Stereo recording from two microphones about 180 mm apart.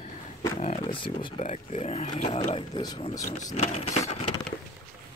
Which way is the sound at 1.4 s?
40° left (ahead or behind).